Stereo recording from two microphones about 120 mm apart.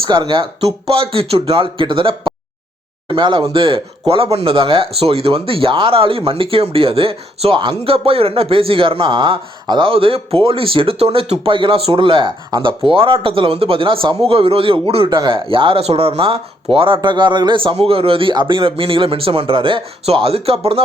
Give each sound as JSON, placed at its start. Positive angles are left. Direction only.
{"t": 0.0, "sound": "speech", "side_deg": -40}